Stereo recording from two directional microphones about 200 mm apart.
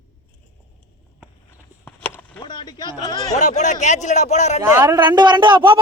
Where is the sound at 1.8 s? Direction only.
5° left (ahead or behind).